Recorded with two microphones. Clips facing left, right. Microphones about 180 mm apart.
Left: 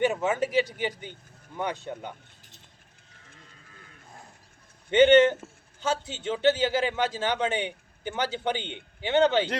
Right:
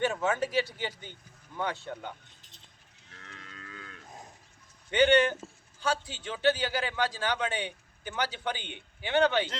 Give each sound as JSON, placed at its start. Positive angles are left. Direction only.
{"t": 0.0, "sound": "speech", "side_deg": 15}
{"t": 3.1, "sound": "livestock", "side_deg": -75}
{"t": 4.9, "sound": "a man's voice", "side_deg": 25}